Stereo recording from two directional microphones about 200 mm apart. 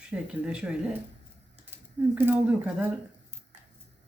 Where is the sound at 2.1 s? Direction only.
10° right (ahead or behind).